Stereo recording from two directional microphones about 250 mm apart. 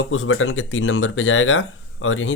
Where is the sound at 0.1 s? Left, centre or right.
Left.